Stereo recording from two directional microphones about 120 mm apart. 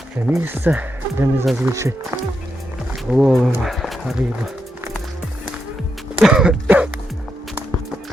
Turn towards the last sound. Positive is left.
turn(degrees=-10)  # may be behind; listen again after turning